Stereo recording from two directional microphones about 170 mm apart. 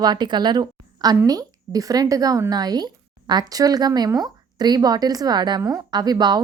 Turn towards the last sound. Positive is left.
turn(degrees=-25)  # may be behind; listen again after turning